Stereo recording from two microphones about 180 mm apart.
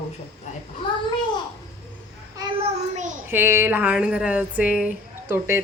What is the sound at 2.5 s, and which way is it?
Child singing, 40° right (ahead or behind).